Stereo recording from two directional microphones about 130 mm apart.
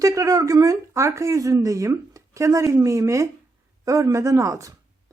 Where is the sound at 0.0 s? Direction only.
25° right (ahead or behind).